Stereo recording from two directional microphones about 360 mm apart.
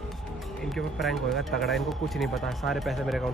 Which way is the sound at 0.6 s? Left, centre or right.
Centre.